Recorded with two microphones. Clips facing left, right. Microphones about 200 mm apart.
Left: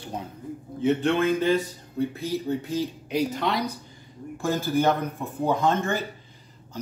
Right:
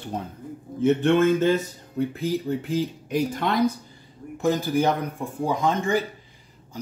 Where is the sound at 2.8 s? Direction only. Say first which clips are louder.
Right 2 dB; 50° right (ahead or behind).